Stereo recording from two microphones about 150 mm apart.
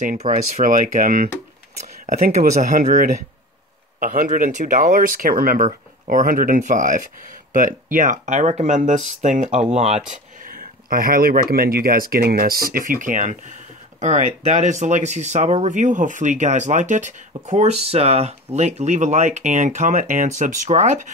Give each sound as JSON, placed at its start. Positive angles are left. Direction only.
{"t": 0.0, "sound": "speech", "side_deg": -55}
{"t": 10.4, "sound": "speech", "side_deg": -70}